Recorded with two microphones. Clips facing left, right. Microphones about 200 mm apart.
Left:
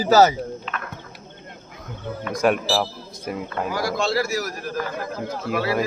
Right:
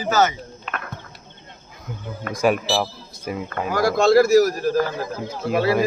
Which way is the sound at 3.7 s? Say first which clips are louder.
Right 9 dB; 50° right (ahead or behind).